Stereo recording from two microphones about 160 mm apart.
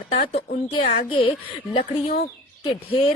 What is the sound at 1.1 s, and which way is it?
Speech, 35° left (ahead or behind).